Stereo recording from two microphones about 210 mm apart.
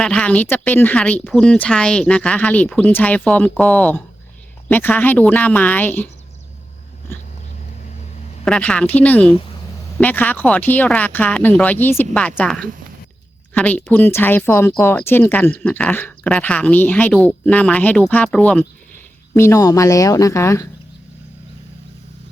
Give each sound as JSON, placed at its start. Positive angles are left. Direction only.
{"t": 0.0, "sound": "speech", "side_deg": 5}
{"t": 8.4, "sound": "speech", "side_deg": 5}